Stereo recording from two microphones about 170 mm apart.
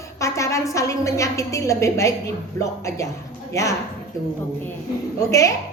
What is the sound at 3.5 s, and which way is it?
Speech, 15° left (ahead or behind).